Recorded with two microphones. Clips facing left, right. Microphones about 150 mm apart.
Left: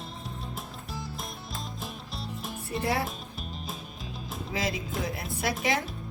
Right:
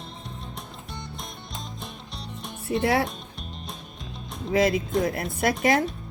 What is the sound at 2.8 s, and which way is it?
Music, 90° right.